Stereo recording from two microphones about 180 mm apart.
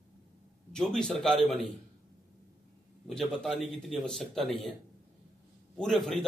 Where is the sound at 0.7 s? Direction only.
5° left (ahead or behind).